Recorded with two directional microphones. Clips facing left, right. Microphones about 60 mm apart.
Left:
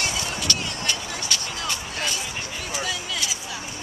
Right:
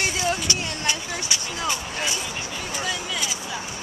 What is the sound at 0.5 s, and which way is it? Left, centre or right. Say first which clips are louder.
Vehicle: right 1 dB; centre.